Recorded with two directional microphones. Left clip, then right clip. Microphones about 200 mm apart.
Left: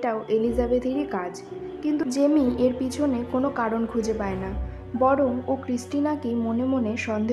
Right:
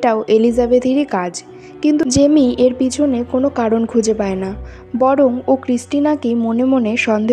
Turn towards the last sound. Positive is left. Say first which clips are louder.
# right 11 dB
turn(degrees=-40)  # may be behind; listen again after turning